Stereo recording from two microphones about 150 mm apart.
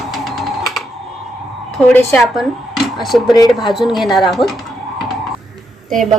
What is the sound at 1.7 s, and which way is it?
Speech, 5° left (ahead or behind).